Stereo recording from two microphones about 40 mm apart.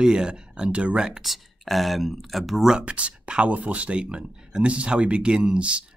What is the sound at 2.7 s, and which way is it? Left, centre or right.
Speech, right.